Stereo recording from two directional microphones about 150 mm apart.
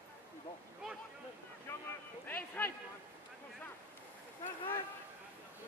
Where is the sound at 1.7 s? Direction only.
15° left (ahead or behind).